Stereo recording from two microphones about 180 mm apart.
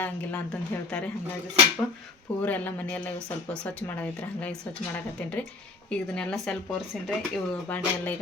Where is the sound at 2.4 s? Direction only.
10° left (ahead or behind).